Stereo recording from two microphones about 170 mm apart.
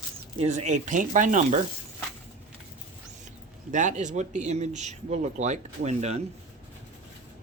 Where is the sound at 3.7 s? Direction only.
45° right (ahead or behind).